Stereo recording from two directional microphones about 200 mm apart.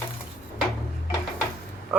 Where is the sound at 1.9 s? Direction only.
5° right (ahead or behind).